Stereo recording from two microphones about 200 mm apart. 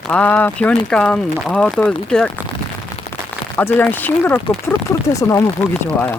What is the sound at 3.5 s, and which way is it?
Speech, 10° left (ahead or behind).